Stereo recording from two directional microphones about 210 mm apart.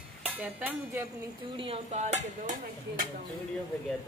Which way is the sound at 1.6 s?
30° right (ahead or behind).